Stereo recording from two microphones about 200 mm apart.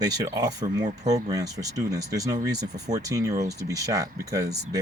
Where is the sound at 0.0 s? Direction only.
20° right (ahead or behind).